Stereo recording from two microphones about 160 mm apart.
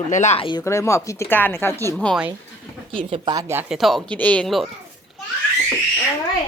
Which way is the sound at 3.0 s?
35° right (ahead or behind).